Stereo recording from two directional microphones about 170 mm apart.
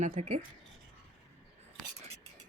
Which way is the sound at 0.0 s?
45° right (ahead or behind).